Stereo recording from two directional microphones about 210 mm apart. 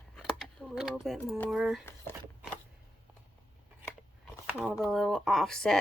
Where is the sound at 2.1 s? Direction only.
10° left (ahead or behind).